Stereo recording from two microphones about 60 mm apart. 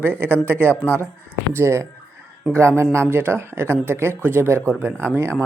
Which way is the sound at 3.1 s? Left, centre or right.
Right.